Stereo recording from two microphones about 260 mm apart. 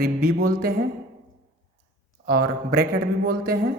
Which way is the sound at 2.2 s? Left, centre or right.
Right.